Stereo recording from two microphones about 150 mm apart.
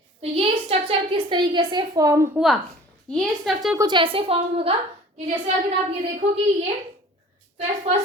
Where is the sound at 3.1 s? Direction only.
Centre (ahead or behind).